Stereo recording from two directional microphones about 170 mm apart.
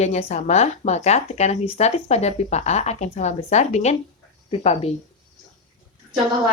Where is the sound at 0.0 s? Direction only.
40° left (ahead or behind).